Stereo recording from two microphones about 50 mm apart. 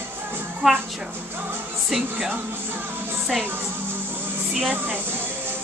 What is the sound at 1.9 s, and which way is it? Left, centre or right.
Speech, centre.